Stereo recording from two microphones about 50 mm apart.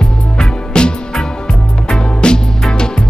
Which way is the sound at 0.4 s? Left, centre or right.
Centre.